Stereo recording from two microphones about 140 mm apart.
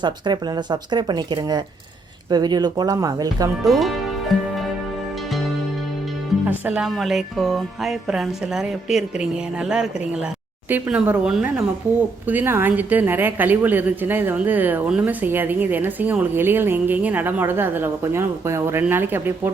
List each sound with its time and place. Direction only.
0.0 s speech: 30° right (ahead or behind)
3.6 s music: centre (ahead or behind)
6.4 s a woman's voice: 10° right (ahead or behind)